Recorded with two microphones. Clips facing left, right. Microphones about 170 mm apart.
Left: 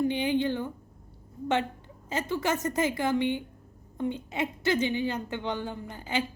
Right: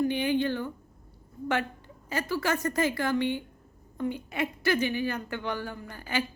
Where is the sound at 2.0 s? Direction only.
20° left (ahead or behind).